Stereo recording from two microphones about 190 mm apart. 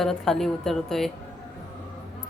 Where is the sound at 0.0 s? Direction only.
Centre (ahead or behind).